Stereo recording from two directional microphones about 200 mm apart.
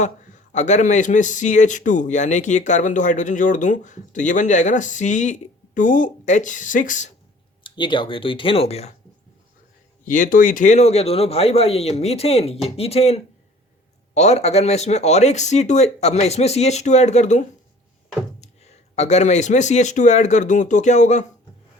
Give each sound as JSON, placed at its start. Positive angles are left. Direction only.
{"t": 0.5, "sound": "speech", "side_deg": 35}
{"t": 7.6, "sound": "speech", "side_deg": 25}
{"t": 10.1, "sound": "speech", "side_deg": 40}